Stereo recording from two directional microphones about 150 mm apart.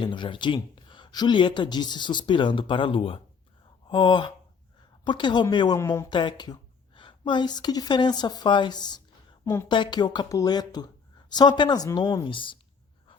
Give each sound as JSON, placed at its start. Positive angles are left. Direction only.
{"t": 0.0, "sound": "speech", "side_deg": 30}
{"t": 6.1, "sound": "a woman's voice", "side_deg": 30}
{"t": 9.6, "sound": "speech", "side_deg": 30}
{"t": 12.2, "sound": "speech", "side_deg": 35}